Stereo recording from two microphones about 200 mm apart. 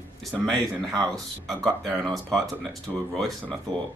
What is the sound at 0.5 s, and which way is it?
Speech, 20° right (ahead or behind).